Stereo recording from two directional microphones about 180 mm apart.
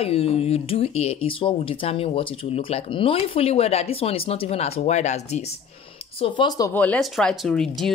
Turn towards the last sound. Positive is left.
turn(degrees=0)  # may be behind; listen again after turning